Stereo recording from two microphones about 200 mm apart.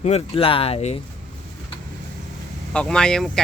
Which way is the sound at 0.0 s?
30° left (ahead or behind).